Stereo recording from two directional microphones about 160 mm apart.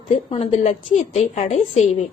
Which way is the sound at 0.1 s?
40° left (ahead or behind).